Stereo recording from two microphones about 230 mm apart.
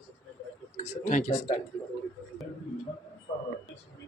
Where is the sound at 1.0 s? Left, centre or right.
Left.